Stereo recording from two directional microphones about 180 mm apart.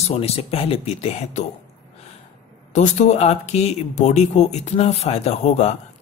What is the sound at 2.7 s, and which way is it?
Speech, 40° left (ahead or behind).